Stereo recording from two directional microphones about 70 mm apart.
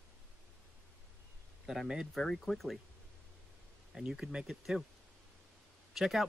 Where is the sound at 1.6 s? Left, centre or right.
Centre.